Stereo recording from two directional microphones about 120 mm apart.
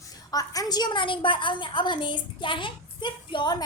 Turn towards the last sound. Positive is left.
turn(degrees=40)  # may be behind; listen again after turning